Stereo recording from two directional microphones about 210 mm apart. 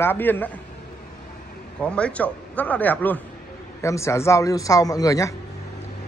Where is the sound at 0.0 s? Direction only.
10° left (ahead or behind).